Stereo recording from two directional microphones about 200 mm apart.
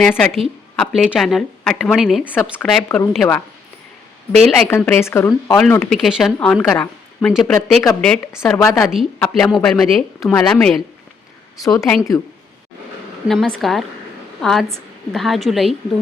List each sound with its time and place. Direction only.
0.0 s a woman's voice: 5° left (ahead or behind)
4.4 s a woman's voice: 5° left (ahead or behind)
8.4 s speech: 15° left (ahead or behind)
8.8 s a woman's voice: centre (ahead or behind)
11.6 s speech: 15° left (ahead or behind)
13.2 s a woman's voice: centre (ahead or behind)